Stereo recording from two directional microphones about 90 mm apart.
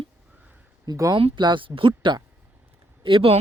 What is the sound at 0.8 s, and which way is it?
Speech, 45° right (ahead or behind).